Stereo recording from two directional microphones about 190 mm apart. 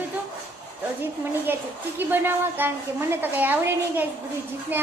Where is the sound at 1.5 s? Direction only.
10° right (ahead or behind).